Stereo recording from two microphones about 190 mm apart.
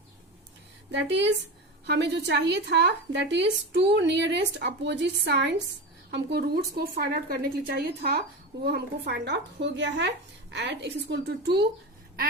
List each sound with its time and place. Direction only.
0.9 s a woman's voice: 70° right (ahead or behind)